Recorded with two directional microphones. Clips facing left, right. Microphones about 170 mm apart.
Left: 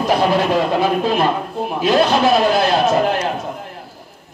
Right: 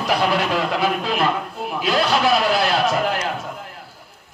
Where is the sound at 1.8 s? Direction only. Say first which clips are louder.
Left 5 dB; 25° left (ahead or behind).